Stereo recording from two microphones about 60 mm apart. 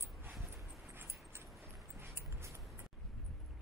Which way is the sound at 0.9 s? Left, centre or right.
Right.